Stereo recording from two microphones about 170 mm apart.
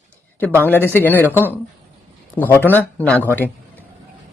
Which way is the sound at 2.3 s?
10° left (ahead or behind).